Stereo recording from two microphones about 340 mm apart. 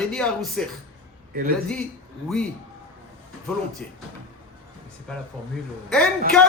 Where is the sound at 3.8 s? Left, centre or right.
Centre.